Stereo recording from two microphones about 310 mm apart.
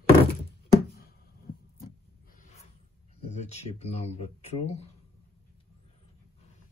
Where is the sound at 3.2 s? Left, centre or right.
Left.